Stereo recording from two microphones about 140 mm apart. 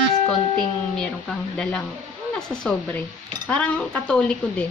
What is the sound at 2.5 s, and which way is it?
A woman's voice, 5° left (ahead or behind).